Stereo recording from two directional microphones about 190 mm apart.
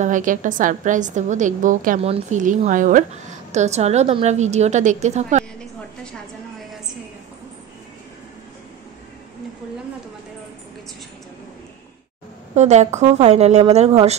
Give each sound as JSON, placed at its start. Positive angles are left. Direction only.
{"t": 0.0, "sound": "a woman's voice", "side_deg": -45}
{"t": 12.5, "sound": "a woman's voice", "side_deg": -35}